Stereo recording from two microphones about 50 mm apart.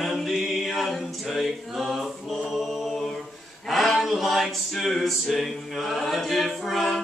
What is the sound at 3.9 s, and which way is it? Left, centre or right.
Music, centre.